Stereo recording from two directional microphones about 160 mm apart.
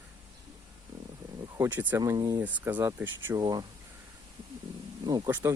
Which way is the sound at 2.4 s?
10° right (ahead or behind).